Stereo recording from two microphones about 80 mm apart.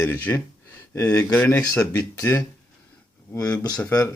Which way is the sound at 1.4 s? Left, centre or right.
Left.